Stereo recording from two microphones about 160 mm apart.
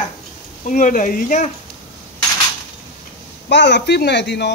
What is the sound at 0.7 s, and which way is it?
Speech, 55° left (ahead or behind).